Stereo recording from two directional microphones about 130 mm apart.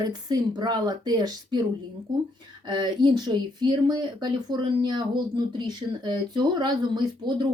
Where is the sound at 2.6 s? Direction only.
35° right (ahead or behind).